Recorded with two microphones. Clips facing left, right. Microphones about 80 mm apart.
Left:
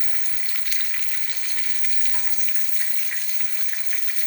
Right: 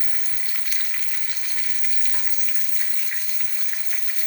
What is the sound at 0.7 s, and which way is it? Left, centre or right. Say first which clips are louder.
Frying: even; centre.